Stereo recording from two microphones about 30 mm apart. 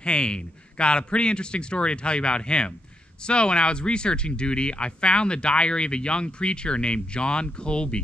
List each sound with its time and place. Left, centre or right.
0.0 s speech: left